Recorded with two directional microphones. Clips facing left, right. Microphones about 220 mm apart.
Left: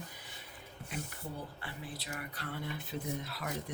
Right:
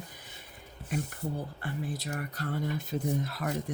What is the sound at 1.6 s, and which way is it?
Speech, 45° right (ahead or behind).